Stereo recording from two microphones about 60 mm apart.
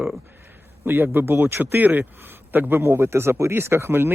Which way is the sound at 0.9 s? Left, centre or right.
Right.